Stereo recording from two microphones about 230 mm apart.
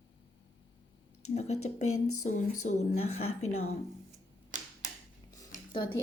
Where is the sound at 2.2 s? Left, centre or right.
Left.